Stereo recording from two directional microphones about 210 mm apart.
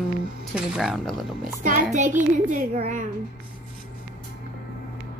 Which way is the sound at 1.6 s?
40° right (ahead or behind).